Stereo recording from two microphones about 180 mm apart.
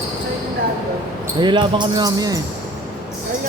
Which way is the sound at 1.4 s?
25° right (ahead or behind).